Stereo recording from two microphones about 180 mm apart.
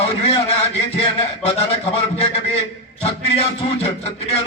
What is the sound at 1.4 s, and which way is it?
Music, 35° left (ahead or behind).